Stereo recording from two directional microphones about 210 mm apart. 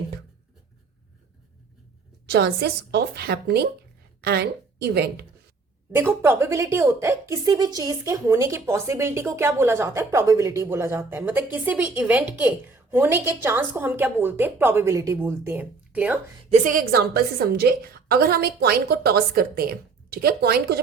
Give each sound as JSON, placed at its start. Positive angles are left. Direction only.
{"t": 2.3, "sound": "a woman's voice", "side_deg": -50}
{"t": 6.0, "sound": "a woman's voice", "side_deg": -10}
{"t": 16.5, "sound": "a woman's voice", "side_deg": -40}